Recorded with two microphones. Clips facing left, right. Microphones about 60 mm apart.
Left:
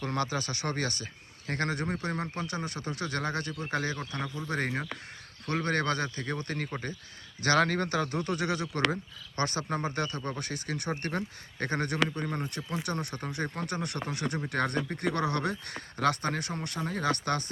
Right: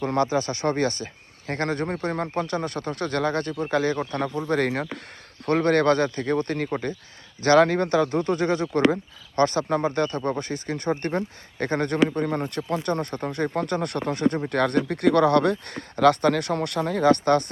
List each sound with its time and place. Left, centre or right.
0.0 s speech: right
12.5 s speech: right
17.0 s speech: right